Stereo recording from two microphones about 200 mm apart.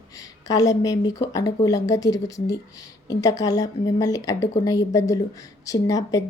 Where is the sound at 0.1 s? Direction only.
15° left (ahead or behind).